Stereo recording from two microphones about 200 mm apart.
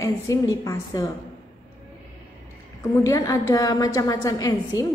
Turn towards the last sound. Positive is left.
turn(degrees=20)  # may be behind; listen again after turning